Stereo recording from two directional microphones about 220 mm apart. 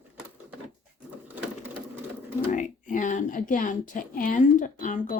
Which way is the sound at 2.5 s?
35° left (ahead or behind).